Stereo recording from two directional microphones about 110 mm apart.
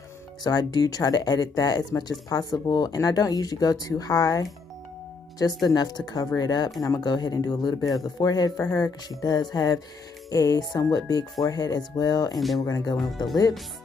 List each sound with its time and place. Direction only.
0.4 s speech: 40° left (ahead or behind)